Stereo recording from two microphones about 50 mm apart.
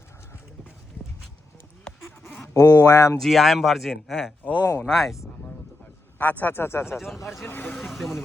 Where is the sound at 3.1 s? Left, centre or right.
Centre.